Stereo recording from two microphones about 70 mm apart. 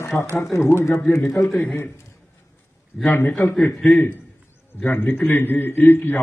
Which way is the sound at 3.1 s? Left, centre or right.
Left.